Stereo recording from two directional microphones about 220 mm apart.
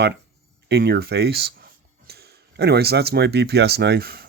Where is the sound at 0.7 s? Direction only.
50° right (ahead or behind).